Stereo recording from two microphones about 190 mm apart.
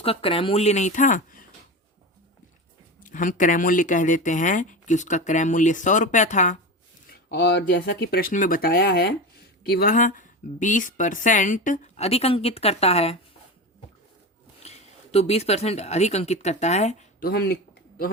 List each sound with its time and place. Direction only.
0.0 s speech: 30° left (ahead or behind)
3.0 s speech: 45° left (ahead or behind)
7.1 s speech: 60° left (ahead or behind); by 13.1 s 35° left (ahead or behind)
14.6 s speech: 35° left (ahead or behind)
17.2 s speech: 55° left (ahead or behind)